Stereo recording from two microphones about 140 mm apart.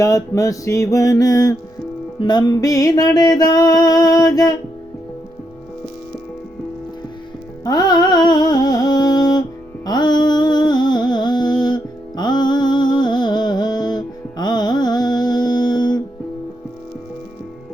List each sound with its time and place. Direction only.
0.0 s music: 25° left (ahead or behind)
7.6 s music: 30° left (ahead or behind)